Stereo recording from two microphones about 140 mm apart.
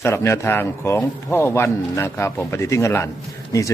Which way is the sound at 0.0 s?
20° left (ahead or behind).